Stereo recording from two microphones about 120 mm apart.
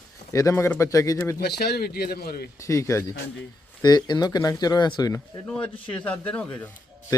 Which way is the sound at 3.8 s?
35° left (ahead or behind).